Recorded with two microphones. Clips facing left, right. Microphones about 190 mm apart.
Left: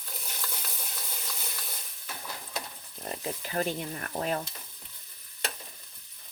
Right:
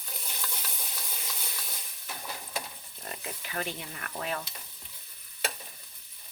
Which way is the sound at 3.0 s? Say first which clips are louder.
Left 6 dB; 35° left (ahead or behind).